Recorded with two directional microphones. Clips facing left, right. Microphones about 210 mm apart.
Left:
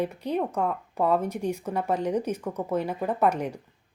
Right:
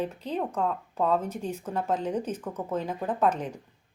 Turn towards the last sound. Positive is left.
turn(degrees=10)  # may be behind; listen again after turning